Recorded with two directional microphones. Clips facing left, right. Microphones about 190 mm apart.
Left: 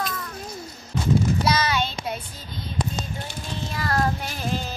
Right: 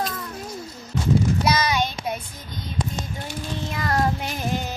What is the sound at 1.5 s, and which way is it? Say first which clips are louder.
Child singing: right 1 dB; 15° right (ahead or behind).